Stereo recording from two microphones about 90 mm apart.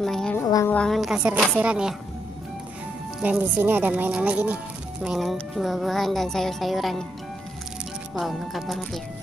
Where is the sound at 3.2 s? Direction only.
15° right (ahead or behind).